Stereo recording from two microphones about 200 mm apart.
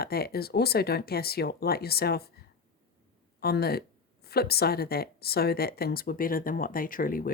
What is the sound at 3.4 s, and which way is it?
Speech, 50° left (ahead or behind).